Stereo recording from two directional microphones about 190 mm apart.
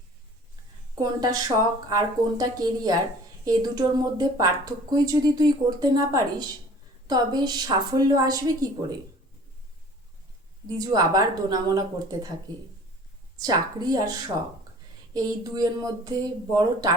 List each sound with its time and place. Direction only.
0.9 s speech: 20° right (ahead or behind)
10.8 s speech: 20° right (ahead or behind)
13.4 s speech: 20° right (ahead or behind)